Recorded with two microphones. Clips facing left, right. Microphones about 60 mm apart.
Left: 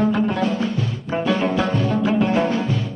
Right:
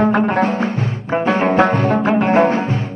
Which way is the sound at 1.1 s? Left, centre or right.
Right.